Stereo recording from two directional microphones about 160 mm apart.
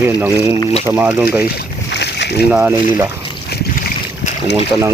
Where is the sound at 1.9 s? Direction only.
90° left.